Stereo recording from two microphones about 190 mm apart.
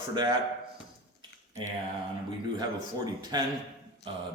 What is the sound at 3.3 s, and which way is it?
Speech, 20° right (ahead or behind).